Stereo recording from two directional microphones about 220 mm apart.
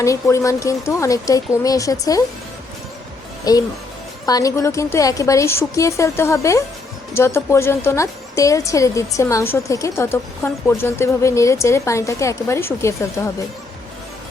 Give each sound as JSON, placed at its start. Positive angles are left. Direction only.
{"t": 0.0, "sound": "a woman's voice", "side_deg": 15}
{"t": 3.5, "sound": "a woman's voice", "side_deg": 15}